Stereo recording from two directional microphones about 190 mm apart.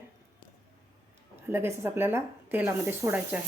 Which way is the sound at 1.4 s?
10° right (ahead or behind).